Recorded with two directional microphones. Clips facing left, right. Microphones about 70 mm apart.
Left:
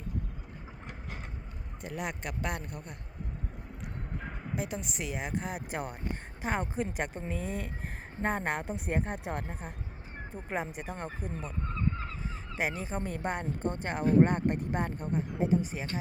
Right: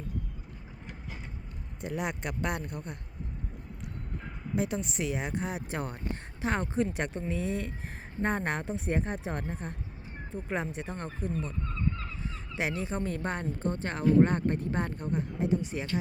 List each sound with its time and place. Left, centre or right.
1.8 s a woman's voice: centre
4.5 s a woman's voice: centre
11.6 s honk: left
12.5 s a woman's voice: centre
13.0 s speech: centre
14.0 s speech: left
14.3 s speech: centre